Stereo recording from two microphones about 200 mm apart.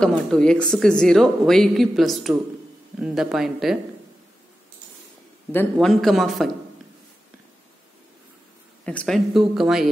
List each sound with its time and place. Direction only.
0.0 s speech: 5° left (ahead or behind)
5.5 s speech: 5° left (ahead or behind)
8.8 s speech: 5° left (ahead or behind)